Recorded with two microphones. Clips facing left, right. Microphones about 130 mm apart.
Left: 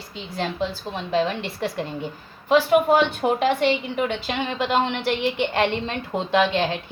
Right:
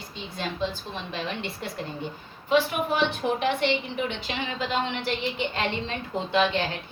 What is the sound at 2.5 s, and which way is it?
A woman's voice, 65° left (ahead or behind).